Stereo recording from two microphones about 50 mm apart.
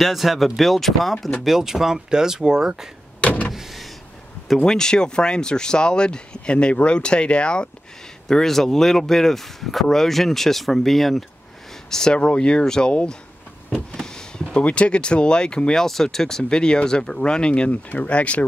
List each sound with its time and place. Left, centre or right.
0.0 s speech: centre
1.4 s speech: centre
3.2 s power windows: left
3.5 s power windows: centre
4.6 s speech: centre
8.3 s speech: centre
11.9 s speech: centre
13.9 s a sound: centre
14.6 s speech: left